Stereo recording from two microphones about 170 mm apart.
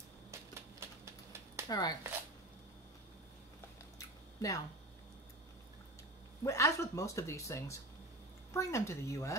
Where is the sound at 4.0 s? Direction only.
20° left (ahead or behind).